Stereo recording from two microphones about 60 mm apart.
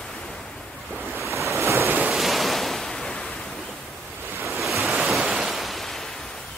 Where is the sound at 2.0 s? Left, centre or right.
Centre.